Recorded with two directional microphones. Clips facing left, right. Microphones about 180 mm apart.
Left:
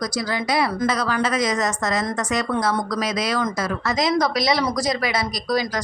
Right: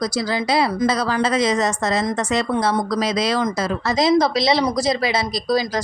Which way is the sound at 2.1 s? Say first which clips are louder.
Right 3 dB; 15° right (ahead or behind).